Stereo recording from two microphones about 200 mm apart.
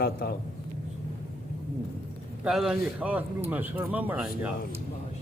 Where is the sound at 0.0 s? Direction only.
50° left (ahead or behind).